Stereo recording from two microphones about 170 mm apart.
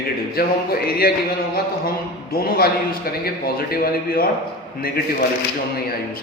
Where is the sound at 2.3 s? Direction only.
65° left (ahead or behind).